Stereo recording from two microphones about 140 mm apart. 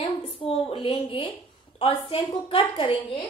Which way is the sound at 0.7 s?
40° left (ahead or behind).